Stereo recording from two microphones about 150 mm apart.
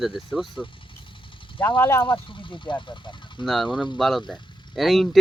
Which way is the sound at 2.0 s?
35° left (ahead or behind).